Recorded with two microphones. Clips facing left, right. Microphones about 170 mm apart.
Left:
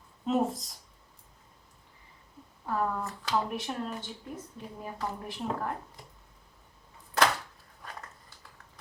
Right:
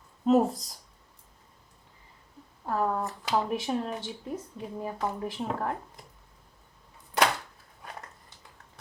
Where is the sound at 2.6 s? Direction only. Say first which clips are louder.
Right 3 dB; 40° right (ahead or behind).